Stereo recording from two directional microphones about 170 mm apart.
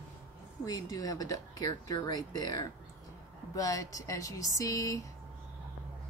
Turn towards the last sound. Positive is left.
turn(degrees=20)  # may be behind; listen again after turning